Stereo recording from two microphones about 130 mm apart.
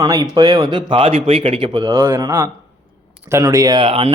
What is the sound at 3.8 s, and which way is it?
Speech, 45° right (ahead or behind).